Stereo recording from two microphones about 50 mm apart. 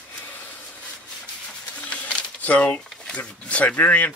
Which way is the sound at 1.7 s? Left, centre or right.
Left.